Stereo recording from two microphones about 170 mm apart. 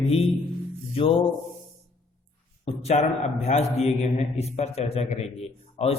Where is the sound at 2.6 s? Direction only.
40° left (ahead or behind).